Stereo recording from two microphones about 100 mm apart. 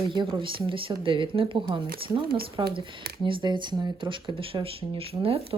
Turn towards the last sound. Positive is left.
turn(degrees=-75)  # may be behind; listen again after turning